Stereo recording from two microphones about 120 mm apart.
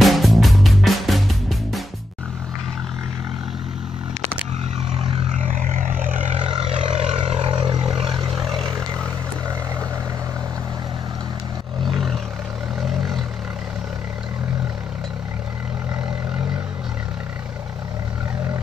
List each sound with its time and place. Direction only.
0.0 s music: centre (ahead or behind)
5.3 s vehicle: 90° right
6.6 s vehicle: 60° right (ahead or behind); by 8.2 s 45° right (ahead or behind)
8.4 s vehicle: 5° left (ahead or behind)
11.8 s roar: centre (ahead or behind)